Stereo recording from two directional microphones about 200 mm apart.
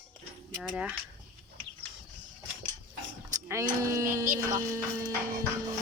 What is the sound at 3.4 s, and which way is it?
Speech, 15° right (ahead or behind).